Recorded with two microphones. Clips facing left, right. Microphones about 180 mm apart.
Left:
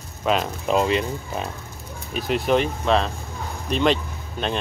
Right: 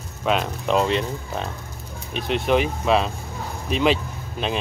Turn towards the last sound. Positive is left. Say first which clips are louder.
# even
turn(degrees=-5)  # may be behind; listen again after turning